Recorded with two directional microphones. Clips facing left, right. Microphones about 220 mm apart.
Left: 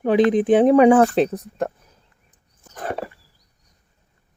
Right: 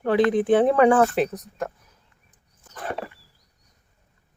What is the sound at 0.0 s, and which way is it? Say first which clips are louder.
Speech: left 3 dB; 15° left (ahead or behind).